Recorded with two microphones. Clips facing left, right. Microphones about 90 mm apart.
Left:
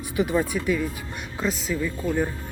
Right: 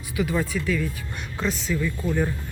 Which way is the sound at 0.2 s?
25° left (ahead or behind).